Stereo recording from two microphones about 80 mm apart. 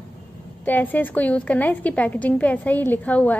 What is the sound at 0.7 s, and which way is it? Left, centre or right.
A woman's voice, left.